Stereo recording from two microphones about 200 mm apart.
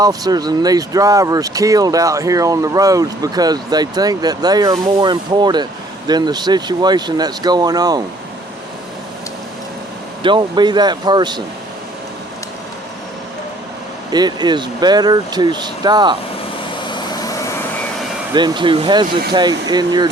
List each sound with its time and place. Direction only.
0.0 s speech: 20° right (ahead or behind)
10.2 s speech: 25° right (ahead or behind)
14.1 s speech: 20° right (ahead or behind)
16.9 s vehicle: 15° left (ahead or behind)
18.3 s speech: 25° right (ahead or behind)